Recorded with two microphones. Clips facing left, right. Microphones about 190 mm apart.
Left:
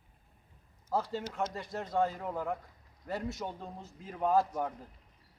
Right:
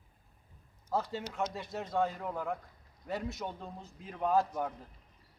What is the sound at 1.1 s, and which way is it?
A man's voice, centre (ahead or behind).